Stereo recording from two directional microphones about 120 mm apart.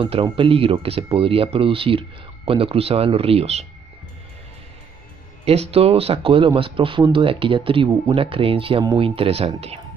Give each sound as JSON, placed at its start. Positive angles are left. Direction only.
{"t": 0.0, "sound": "speech", "side_deg": -50}
{"t": 5.4, "sound": "speech", "side_deg": -60}